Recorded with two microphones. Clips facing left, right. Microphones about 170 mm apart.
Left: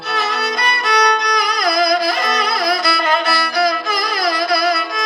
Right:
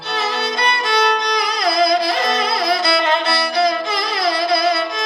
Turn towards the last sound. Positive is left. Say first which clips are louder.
# even
turn(degrees=-25)  # may be behind; listen again after turning